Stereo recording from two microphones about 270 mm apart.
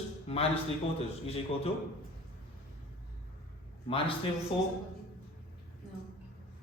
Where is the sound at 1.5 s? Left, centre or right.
Left.